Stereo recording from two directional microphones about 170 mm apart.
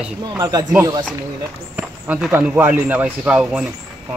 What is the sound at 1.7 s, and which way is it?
Speech, 10° right (ahead or behind).